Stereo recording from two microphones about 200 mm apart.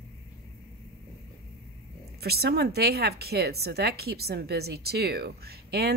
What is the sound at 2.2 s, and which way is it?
A woman's voice, 50° right (ahead or behind).